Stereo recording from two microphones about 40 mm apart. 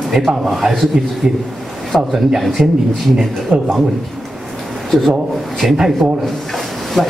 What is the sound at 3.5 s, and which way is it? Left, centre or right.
Speech, right.